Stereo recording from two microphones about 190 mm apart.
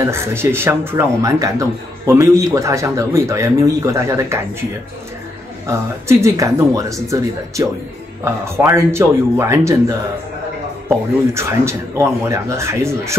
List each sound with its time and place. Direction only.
0.0 s speech: 15° right (ahead or behind)
5.7 s speech: 15° right (ahead or behind)